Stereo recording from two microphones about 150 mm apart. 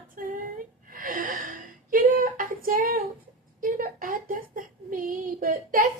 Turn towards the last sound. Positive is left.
turn(degrees=-65)  # may be behind; listen again after turning